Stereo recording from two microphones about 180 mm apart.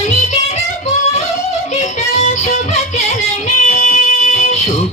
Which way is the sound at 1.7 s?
35° left (ahead or behind).